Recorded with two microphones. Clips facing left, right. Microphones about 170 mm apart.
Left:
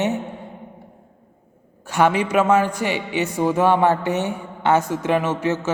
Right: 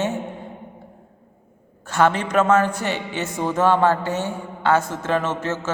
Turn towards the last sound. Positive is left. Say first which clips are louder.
# left 3 dB
turn(degrees=15)  # may be behind; listen again after turning